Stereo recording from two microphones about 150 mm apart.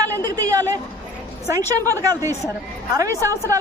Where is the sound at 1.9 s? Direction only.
20° right (ahead or behind).